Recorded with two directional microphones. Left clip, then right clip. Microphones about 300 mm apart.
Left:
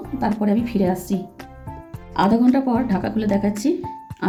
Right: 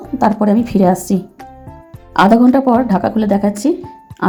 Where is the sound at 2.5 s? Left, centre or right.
Centre.